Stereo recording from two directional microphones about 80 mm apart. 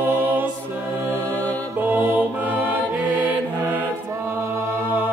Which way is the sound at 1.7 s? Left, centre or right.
Right.